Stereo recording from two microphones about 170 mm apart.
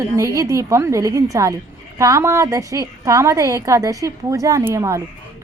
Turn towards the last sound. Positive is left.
turn(degrees=-20)  # may be behind; listen again after turning